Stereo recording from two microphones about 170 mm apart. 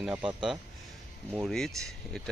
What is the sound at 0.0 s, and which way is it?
Speech, 10° right (ahead or behind).